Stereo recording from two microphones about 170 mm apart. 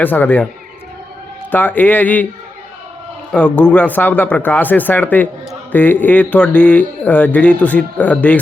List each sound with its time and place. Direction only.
0.0 s speech: 10° left (ahead or behind)
1.5 s speech: 10° left (ahead or behind)
3.3 s speech: 10° left (ahead or behind)